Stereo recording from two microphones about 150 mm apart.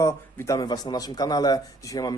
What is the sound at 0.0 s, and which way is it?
Speech, 20° left (ahead or behind).